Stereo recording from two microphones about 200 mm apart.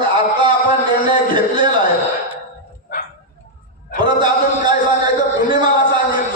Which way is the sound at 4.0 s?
20° right (ahead or behind).